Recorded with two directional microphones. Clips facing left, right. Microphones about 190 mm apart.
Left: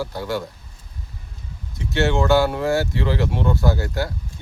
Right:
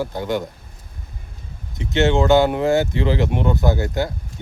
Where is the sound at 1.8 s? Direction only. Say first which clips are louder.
Right 3 dB; 20° right (ahead or behind).